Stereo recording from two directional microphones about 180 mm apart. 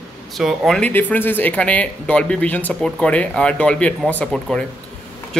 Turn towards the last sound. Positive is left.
turn(degrees=5)  # may be behind; listen again after turning